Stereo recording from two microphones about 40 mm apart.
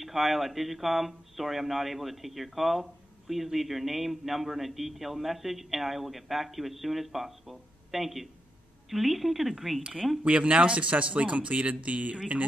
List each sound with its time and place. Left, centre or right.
0.0 s speech: centre
10.2 s speech: right